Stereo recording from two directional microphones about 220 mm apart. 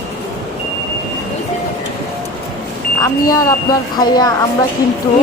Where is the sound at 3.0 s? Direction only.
15° left (ahead or behind).